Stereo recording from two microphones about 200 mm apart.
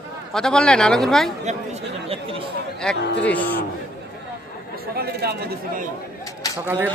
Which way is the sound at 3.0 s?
55° left (ahead or behind).